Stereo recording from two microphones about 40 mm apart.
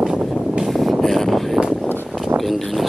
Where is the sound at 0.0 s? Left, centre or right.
Centre.